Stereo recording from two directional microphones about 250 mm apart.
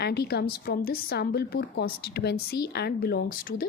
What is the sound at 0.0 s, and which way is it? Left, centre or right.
A woman's voice, left.